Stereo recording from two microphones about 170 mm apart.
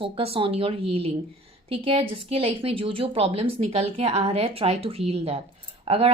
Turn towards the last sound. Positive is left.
turn(degrees=-35)  # may be behind; listen again after turning